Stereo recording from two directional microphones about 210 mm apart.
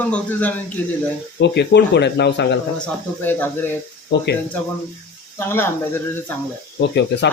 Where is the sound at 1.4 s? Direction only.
55° left (ahead or behind).